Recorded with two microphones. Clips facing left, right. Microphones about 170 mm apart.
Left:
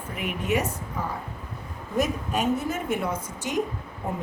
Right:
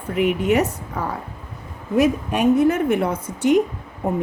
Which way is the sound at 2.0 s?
65° right (ahead or behind).